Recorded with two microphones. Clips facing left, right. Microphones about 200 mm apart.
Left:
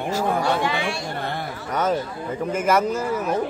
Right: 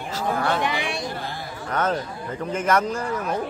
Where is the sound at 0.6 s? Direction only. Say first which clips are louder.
Left 1 dB; 20° right (ahead or behind).